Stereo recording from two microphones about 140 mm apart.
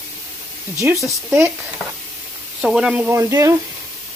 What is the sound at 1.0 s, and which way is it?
Speech, 15° right (ahead or behind).